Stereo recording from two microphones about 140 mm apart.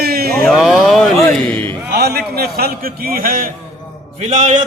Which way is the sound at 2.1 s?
90° right.